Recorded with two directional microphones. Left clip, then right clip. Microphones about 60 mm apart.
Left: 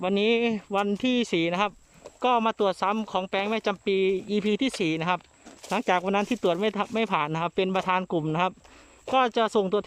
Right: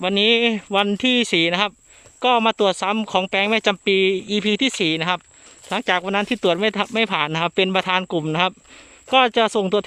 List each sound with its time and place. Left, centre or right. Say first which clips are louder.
0.0 s speech: right 7 dB; centre
0.5 s speech: right 7 dB; centre
2.2 s speech: right 6 dB; centre
2.9 s speech: right 7 dB; right
3.3 s speech: right 8 dB; centre
4.1 s speech: right 5 dB; centre
6.3 s speech: right 6 dB; centre
9.1 s speech: right 6 dB; centre